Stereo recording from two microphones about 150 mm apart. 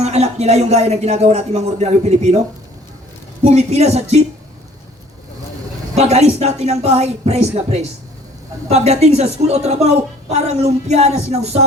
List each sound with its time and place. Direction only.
0.0 s speech: 45° right (ahead or behind)
3.4 s speech: 45° right (ahead or behind)
6.0 s speech: 45° right (ahead or behind)